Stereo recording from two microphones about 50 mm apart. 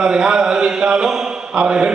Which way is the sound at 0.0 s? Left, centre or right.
Centre.